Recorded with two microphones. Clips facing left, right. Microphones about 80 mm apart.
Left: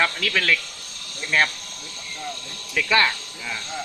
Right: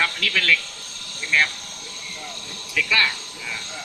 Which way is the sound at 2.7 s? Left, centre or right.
Left.